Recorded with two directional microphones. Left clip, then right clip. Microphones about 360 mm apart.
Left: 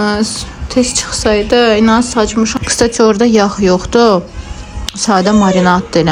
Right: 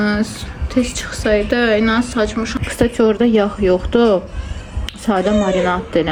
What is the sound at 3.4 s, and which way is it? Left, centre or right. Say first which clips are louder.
Speech: left 4 dB; right.